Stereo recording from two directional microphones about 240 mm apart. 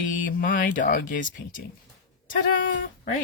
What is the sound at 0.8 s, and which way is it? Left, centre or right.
Speech, left.